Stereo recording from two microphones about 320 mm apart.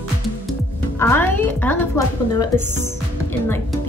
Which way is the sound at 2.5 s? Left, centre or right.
Right.